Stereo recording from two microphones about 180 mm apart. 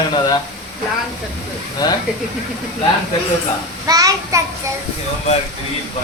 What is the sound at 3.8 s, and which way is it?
Speech, 20° right (ahead or behind).